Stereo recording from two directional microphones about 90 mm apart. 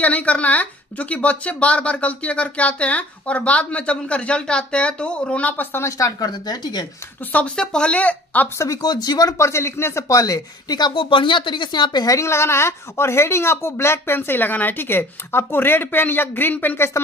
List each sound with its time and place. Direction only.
0.0 s a woman's voice: 15° left (ahead or behind); by 6.9 s 50° left (ahead or behind)
7.3 s a woman's voice: 10° left (ahead or behind)
8.8 s speech: 50° left (ahead or behind)
9.4 s speech: 30° left (ahead or behind); by 11.1 s 50° left (ahead or behind)
11.1 s speech: 65° left (ahead or behind); by 12.2 s 50° left (ahead or behind)
12.2 s speech: 30° left (ahead or behind)